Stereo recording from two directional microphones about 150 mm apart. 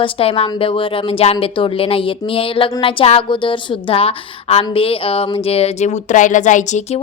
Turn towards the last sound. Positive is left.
turn(degrees=55)  # may be behind; listen again after turning